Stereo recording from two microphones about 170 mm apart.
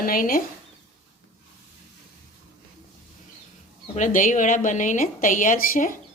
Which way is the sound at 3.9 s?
50° left (ahead or behind).